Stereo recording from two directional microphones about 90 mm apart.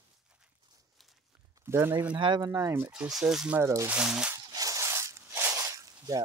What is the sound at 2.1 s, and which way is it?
Speech, 65° right (ahead or behind).